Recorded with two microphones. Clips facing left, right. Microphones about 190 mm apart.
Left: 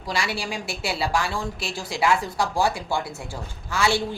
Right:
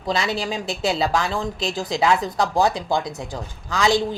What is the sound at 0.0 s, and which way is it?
A woman's voice, 20° right (ahead or behind).